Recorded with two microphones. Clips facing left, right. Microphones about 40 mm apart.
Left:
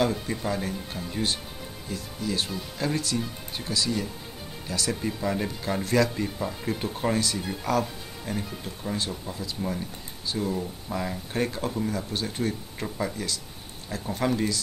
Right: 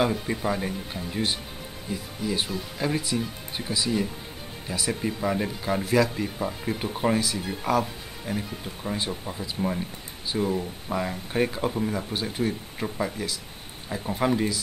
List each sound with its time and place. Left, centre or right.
0.0 s speech: centre